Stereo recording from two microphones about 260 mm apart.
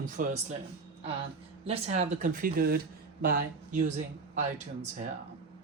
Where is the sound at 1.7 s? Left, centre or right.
Right.